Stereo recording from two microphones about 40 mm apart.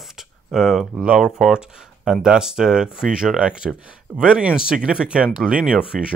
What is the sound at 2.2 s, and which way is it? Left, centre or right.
Speech, centre.